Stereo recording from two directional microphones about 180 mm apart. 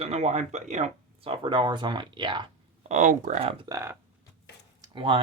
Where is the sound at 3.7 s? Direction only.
15° right (ahead or behind).